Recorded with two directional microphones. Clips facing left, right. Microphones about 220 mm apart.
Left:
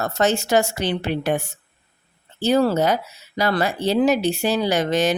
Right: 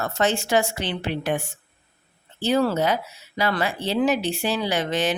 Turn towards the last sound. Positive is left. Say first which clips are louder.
# left 4 dB
turn(degrees=40)  # may be behind; listen again after turning